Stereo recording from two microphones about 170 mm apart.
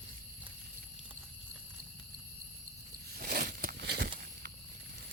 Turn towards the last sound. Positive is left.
turn(degrees=-70)  # may be behind; listen again after turning